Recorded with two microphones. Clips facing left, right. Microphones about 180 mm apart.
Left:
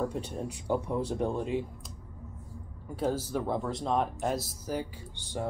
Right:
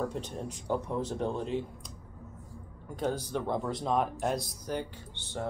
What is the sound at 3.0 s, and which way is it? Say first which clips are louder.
Speech: left 2 dB; 5° left (ahead or behind).